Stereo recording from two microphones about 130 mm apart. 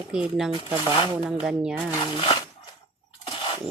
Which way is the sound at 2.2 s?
45° left (ahead or behind).